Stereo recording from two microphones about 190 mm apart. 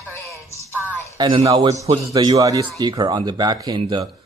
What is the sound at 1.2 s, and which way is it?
A man's voice, 30° right (ahead or behind).